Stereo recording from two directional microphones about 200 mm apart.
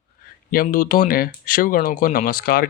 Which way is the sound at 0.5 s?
45° left (ahead or behind).